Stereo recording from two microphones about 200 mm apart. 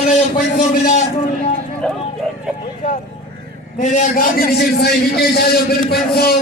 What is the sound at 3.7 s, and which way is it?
A man's voice, 40° left (ahead or behind).